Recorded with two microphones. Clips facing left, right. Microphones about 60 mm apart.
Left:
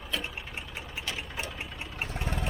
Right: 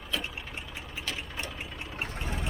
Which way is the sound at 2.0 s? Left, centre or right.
Centre.